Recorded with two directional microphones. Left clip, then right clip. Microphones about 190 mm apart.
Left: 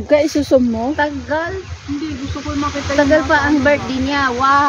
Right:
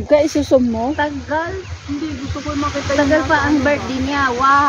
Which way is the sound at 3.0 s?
50° left (ahead or behind).